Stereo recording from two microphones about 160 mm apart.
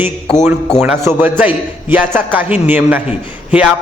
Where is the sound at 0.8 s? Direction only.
10° right (ahead or behind).